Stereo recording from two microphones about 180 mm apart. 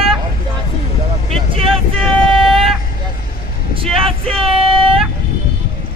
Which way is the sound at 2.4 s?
Centre (ahead or behind).